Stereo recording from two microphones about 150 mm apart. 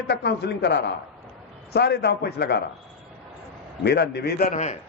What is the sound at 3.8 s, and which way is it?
Speech, 90° left.